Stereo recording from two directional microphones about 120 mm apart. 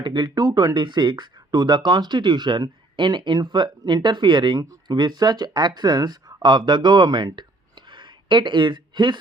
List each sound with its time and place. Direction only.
0.0 s speech: 35° right (ahead or behind)